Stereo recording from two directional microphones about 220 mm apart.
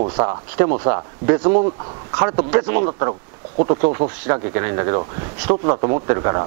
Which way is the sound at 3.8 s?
25° right (ahead or behind).